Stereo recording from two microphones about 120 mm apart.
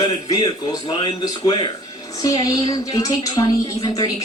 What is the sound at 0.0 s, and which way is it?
A man's voice, 35° left (ahead or behind).